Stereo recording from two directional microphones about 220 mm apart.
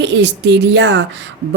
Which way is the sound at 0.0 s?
50° right (ahead or behind).